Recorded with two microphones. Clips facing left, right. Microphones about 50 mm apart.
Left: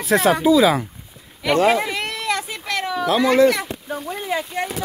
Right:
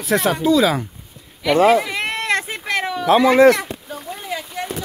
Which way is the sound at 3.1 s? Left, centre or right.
Right.